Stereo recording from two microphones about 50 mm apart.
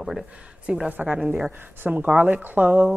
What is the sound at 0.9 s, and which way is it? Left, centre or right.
Speech, right.